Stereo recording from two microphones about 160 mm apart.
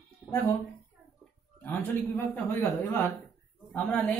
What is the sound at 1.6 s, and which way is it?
A man's voice, 10° left (ahead or behind).